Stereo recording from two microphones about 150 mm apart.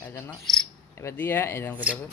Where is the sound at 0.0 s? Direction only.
15° left (ahead or behind).